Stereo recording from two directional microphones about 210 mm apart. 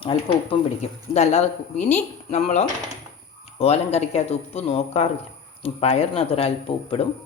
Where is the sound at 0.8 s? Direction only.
30° left (ahead or behind).